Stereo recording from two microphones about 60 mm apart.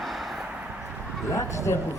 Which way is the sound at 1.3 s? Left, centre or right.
Left.